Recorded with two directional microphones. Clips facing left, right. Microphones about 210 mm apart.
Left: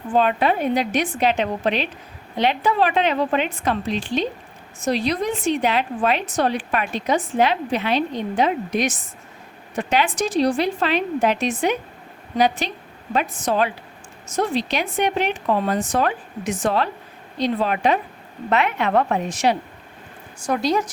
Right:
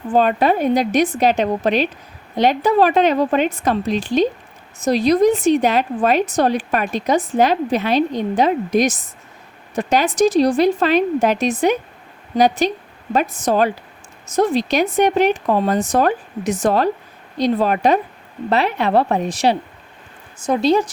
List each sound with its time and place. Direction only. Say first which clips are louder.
0.1 s a woman's voice: right 3 dB; 40° right (ahead or behind)